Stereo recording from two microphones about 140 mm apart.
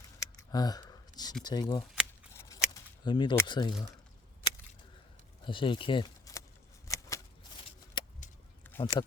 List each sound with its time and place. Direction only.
0.2 s a sound: 30° left (ahead or behind)
1.5 s speech: 30° left (ahead or behind)
2.3 s scissors: 20° left (ahead or behind)
3.0 s speech: 35° left (ahead or behind)
5.5 s speech: 35° left (ahead or behind)
6.3 s a sound: 25° left (ahead or behind)
8.0 s vehicle: 30° left (ahead or behind)
8.8 s speech: 30° left (ahead or behind)